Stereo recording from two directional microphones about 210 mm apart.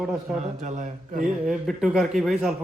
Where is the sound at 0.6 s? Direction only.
35° right (ahead or behind).